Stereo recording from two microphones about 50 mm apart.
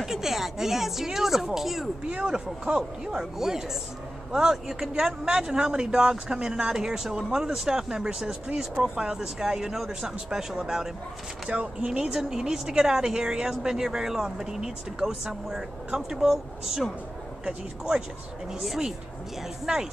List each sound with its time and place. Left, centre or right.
0.0 s speech: centre
2.0 s speech: centre
11.5 s speech: right
17.5 s speech: centre
18.5 s speech: centre